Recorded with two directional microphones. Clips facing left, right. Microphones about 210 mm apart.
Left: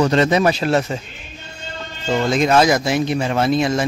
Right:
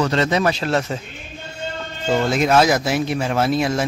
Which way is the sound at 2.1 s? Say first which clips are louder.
Left 1 dB; 5° right (ahead or behind).